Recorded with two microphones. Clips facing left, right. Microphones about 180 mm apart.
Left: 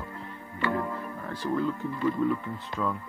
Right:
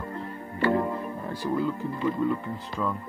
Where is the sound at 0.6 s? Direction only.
25° right (ahead or behind).